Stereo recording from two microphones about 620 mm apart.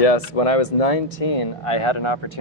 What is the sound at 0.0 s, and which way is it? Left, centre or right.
Speech, left.